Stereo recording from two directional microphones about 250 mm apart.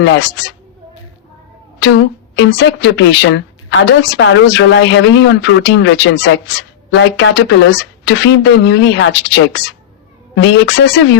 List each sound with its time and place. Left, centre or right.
0.0 s a woman's voice: left
1.8 s a woman's voice: left